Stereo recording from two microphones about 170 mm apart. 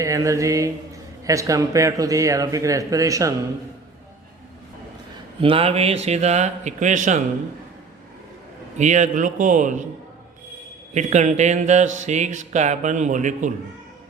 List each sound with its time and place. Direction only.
0.0 s a man's voice: 20° right (ahead or behind)
5.4 s speech: 35° right (ahead or behind)
8.8 s speech: 45° right (ahead or behind)
10.9 s speech: 45° right (ahead or behind)